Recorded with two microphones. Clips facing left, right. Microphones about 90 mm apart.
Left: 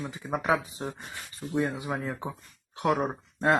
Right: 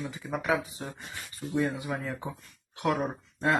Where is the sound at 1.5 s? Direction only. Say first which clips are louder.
Left 1 dB; 20° left (ahead or behind).